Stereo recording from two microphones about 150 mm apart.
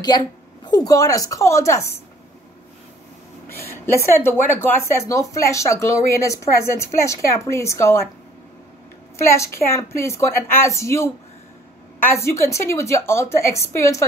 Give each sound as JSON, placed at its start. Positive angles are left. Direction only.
{"t": 0.7, "sound": "a woman's voice", "side_deg": 25}
{"t": 3.4, "sound": "a woman's voice", "side_deg": 15}
{"t": 9.2, "sound": "a woman's voice", "side_deg": 20}
{"t": 12.1, "sound": "a woman's voice", "side_deg": 20}